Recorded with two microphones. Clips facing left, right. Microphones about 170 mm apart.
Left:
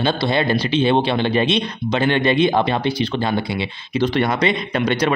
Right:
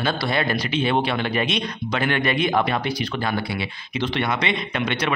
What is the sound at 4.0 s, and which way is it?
A man's voice, 40° left (ahead or behind).